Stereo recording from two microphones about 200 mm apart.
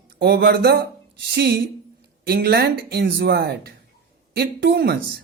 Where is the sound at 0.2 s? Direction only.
55° right (ahead or behind).